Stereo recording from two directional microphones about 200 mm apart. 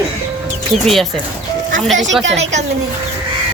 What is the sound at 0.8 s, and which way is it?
Speech, centre (ahead or behind).